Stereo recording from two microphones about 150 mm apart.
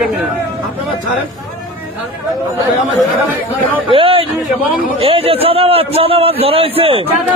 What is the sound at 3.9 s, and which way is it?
A man's voice, 35° right (ahead or behind).